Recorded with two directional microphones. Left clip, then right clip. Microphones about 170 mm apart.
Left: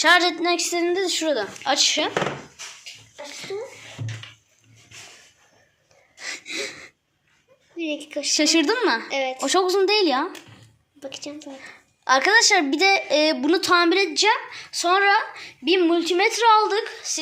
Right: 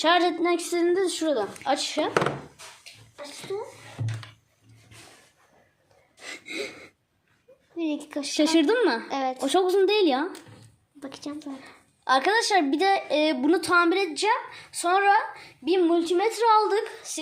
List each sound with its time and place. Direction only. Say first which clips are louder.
0.0 s a woman's voice: left 4 dB; 20° right (ahead or behind)
0.6 s speech: left 1 dB; 5° right (ahead or behind)
6.1 s gasp: left 4 dB; 15° right (ahead or behind)
7.8 s a woman's voice: left 2 dB; 80° right
8.3 s speech: left 2 dB; 20° right (ahead or behind)
9.0 s a woman's voice: left 3 dB; 65° right (ahead or behind)
9.4 s speech: left 2 dB; 15° right (ahead or behind)
11.0 s speech: left 3 dB; 80° right
12.0 s speech: left 5 dB; 10° right (ahead or behind)
15.6 s a woman's voice: left 3 dB; 10° left (ahead or behind)
16.3 s speech: left 3 dB; 10° right (ahead or behind)